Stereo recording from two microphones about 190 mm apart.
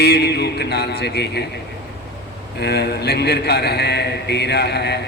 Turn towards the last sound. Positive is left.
turn(degrees=60)  # may be behind; listen again after turning